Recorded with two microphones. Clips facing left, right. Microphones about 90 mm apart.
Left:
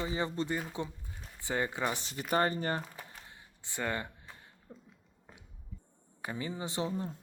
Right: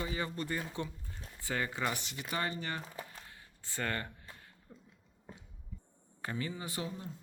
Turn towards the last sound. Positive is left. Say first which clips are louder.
# left 6 dB
turn(degrees=25)  # may be behind; listen again after turning